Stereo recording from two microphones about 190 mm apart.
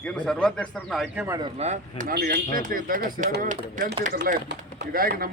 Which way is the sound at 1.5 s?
35° right (ahead or behind).